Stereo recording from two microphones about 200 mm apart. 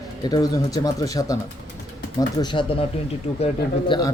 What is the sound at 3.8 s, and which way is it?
Speech, 20° left (ahead or behind).